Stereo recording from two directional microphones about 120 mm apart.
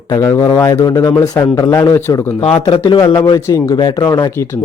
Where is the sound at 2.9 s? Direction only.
45° left (ahead or behind).